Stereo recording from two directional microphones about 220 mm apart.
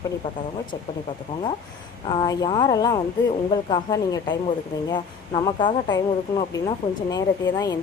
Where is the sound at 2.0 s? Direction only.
20° left (ahead or behind).